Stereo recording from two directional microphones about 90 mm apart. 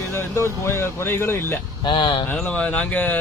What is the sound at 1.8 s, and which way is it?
Speech, 60° left (ahead or behind).